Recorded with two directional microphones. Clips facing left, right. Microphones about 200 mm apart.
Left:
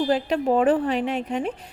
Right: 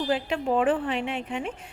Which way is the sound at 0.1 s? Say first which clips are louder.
Left 4 dB; 40° left (ahead or behind).